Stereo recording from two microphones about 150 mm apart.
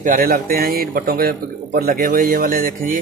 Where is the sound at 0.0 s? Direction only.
65° right (ahead or behind).